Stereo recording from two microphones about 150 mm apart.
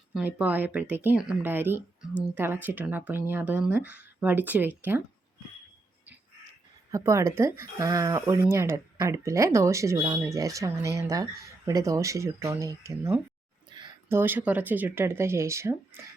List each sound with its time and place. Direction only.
0.1 s speech: 10° right (ahead or behind)
6.9 s speech: 20° right (ahead or behind)
13.7 s a sound: 30° right (ahead or behind)
14.1 s speech: 15° right (ahead or behind)